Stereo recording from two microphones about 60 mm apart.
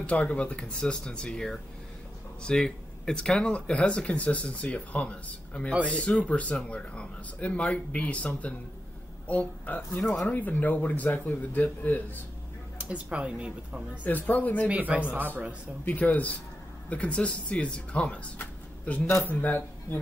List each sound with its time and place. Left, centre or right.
0.0 s speech: left
12.7 s speech: centre
14.0 s speech: left
14.7 s speech: right
15.9 s a man's voice: left